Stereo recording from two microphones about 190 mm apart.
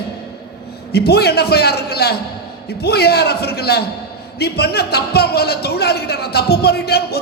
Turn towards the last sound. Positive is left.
turn(degrees=55)  # may be behind; listen again after turning